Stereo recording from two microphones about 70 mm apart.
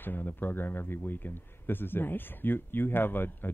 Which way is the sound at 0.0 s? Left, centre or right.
Left.